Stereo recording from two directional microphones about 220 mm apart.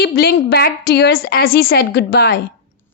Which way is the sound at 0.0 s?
45° left (ahead or behind).